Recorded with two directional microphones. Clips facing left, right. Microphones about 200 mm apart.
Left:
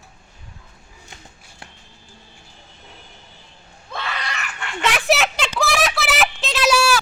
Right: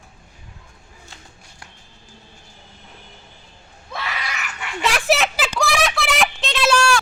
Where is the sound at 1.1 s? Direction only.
20° left (ahead or behind).